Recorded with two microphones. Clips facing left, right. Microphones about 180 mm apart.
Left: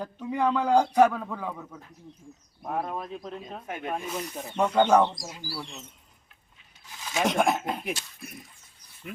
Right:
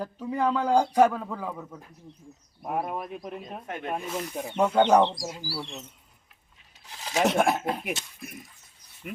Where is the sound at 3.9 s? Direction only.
5° right (ahead or behind).